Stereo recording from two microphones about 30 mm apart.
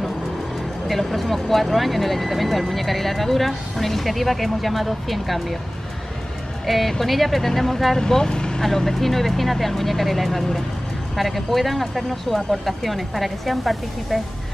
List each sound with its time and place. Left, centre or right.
0.8 s speech: centre
6.6 s speech: centre
8.1 s speech: left
8.6 s speech: centre